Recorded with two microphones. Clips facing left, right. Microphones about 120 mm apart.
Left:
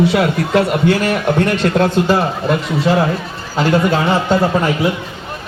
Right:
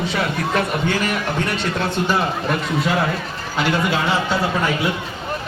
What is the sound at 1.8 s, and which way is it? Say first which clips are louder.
Speech: left 6 dB; 40° left (ahead or behind).